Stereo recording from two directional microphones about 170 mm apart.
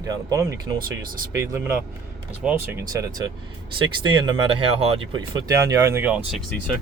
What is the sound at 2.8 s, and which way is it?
Speech, 20° right (ahead or behind).